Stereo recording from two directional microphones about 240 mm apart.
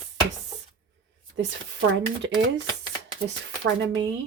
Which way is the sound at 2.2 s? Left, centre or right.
Right.